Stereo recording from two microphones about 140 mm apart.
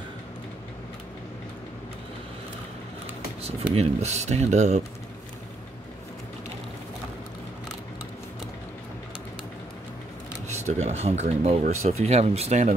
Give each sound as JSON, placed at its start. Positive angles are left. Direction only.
{"t": 3.4, "sound": "speech", "side_deg": -45}
{"t": 10.5, "sound": "speech", "side_deg": -55}